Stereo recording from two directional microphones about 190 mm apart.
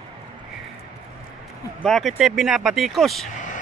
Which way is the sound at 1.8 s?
Centre (ahead or behind).